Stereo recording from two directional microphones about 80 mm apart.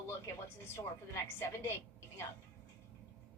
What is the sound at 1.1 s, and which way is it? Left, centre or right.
Speech, left.